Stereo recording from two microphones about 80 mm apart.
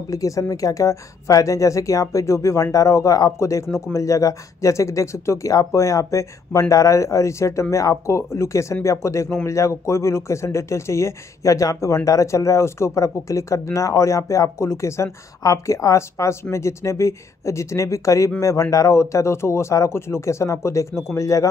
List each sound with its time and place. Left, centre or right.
0.1 s a woman's voice: left